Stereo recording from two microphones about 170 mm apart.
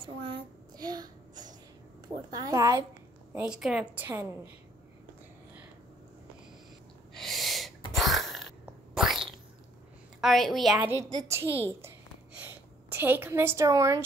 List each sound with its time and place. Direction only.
0.0 s child singing: 30° right (ahead or behind)
2.3 s a woman's voice: 20° right (ahead or behind)
3.3 s a woman's voice: 5° right (ahead or behind)
7.2 s owl: centre (ahead or behind)
7.9 s a sound: centre (ahead or behind)
10.2 s a woman's voice: centre (ahead or behind)
10.9 s a woman's voice: 20° right (ahead or behind)